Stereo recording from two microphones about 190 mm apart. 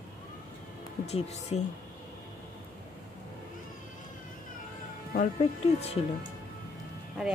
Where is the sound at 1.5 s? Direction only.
35° left (ahead or behind).